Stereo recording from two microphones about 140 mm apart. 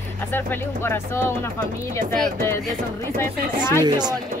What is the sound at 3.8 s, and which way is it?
Speech, 30° right (ahead or behind).